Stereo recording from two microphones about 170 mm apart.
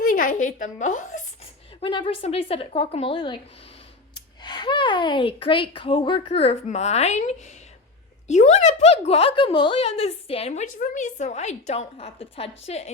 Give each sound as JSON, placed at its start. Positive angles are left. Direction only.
{"t": 0.0, "sound": "a woman's voice", "side_deg": 55}
{"t": 1.8, "sound": "speech", "side_deg": 30}